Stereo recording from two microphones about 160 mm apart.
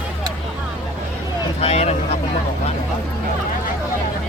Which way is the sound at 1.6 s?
40° left (ahead or behind).